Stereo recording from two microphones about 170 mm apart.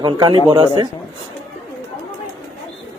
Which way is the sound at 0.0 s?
25° right (ahead or behind).